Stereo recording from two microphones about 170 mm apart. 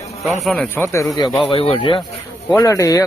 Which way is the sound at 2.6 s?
20° left (ahead or behind).